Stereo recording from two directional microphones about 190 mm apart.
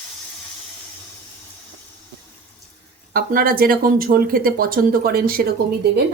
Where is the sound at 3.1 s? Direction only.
50° right (ahead or behind).